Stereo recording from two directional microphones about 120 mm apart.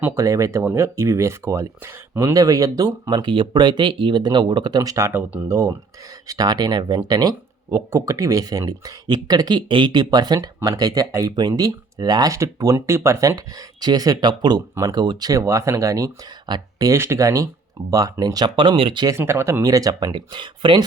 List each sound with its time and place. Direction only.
0.0 s speech: 25° right (ahead or behind); by 19.0 s 40° right (ahead or behind)
19.0 s speech: 20° right (ahead or behind); by 20.8 s 40° right (ahead or behind)